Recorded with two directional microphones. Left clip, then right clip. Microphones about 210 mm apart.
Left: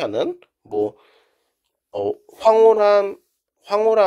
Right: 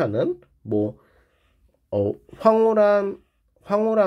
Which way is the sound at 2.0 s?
25° left (ahead or behind).